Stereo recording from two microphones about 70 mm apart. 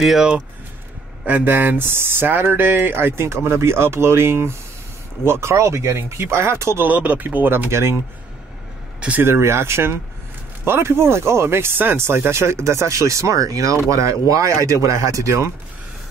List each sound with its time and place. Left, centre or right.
1.2 s speech: right
6.9 s speech: right
9.2 s speech: right